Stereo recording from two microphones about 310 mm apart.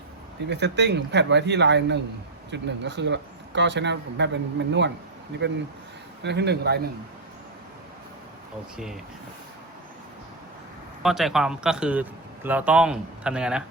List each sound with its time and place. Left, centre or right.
0.4 s speech: right
11.0 s a man's voice: centre